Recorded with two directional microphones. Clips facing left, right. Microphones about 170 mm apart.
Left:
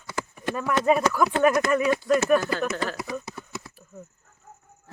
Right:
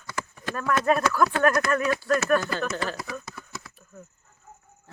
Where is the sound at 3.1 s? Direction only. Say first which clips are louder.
Left 4 dB; 25° left (ahead or behind).